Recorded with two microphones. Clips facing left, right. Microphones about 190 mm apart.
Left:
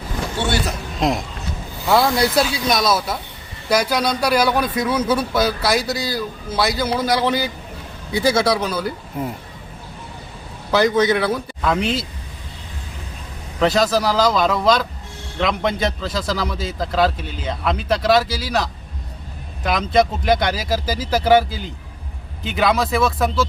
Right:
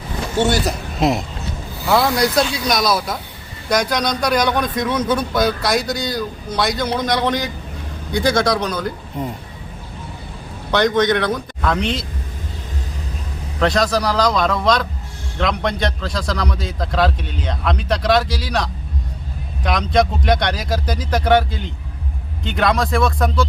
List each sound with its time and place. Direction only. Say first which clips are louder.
0.3 s a man's voice: right 5 dB; 40° right (ahead or behind)
0.9 s a sound: right 2 dB; 5° right (ahead or behind)
1.9 s speech: even; centre (ahead or behind)
10.7 s speech: even; 5° left (ahead or behind)
13.6 s speech: left 1 dB; 5° left (ahead or behind)